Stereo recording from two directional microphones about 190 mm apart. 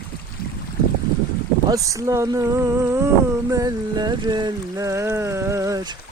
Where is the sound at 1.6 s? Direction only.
15° right (ahead or behind).